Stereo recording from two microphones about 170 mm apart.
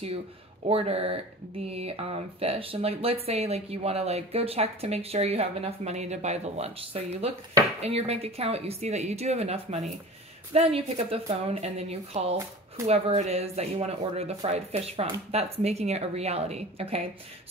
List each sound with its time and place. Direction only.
0.7 s speech: 35° right (ahead or behind)